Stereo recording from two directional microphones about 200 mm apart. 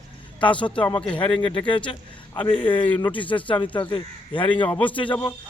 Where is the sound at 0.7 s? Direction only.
5° left (ahead or behind).